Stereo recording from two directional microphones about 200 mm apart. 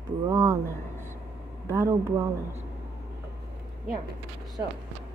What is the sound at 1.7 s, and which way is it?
Speech, 15° right (ahead or behind).